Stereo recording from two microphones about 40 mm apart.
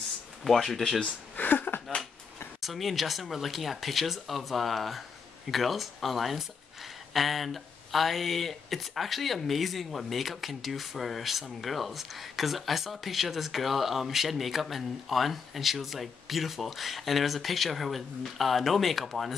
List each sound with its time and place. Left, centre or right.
0.4 s speech: centre
1.3 s a sound: left
2.6 s speech: centre